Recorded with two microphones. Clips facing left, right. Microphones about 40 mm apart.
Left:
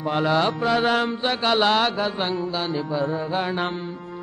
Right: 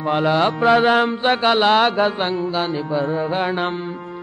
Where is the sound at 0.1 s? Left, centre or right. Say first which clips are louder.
Right 4 dB; right.